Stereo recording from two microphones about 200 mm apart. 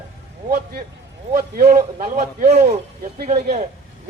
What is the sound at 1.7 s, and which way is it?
A man's voice, 35° right (ahead or behind).